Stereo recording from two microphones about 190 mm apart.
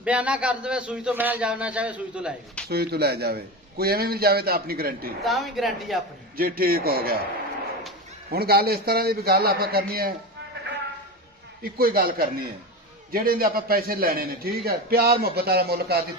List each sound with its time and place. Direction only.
0.0 s a man's voice: 5° right (ahead or behind)
2.7 s a man's voice: 55° right (ahead or behind)
5.2 s speech: centre (ahead or behind)
6.3 s a man's voice: 50° right (ahead or behind)
8.3 s a man's voice: 55° right (ahead or behind)
11.6 s a man's voice: 50° right (ahead or behind)